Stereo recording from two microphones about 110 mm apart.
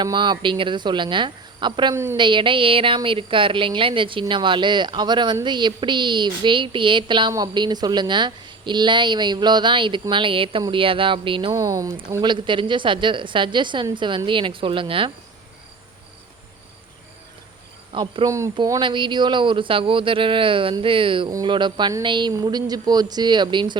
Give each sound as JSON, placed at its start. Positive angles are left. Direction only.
{"t": 0.0, "sound": "speech", "side_deg": -40}
{"t": 11.5, "sound": "speech", "side_deg": -30}
{"t": 12.2, "sound": "speech", "side_deg": -45}
{"t": 17.9, "sound": "speech", "side_deg": -45}
{"t": 18.3, "sound": "speech", "side_deg": -25}
{"t": 18.5, "sound": "speech", "side_deg": -40}